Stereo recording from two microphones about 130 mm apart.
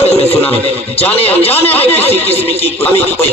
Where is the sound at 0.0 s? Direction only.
50° left (ahead or behind).